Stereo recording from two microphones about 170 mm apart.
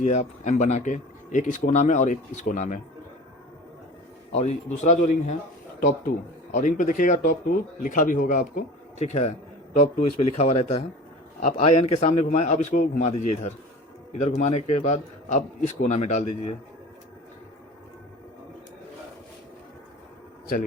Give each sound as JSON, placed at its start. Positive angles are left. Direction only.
{"t": 0.0, "sound": "speech", "side_deg": 45}
{"t": 4.3, "sound": "speech", "side_deg": 40}